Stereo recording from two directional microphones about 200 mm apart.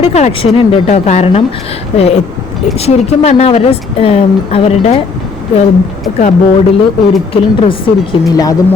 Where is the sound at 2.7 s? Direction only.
30° left (ahead or behind).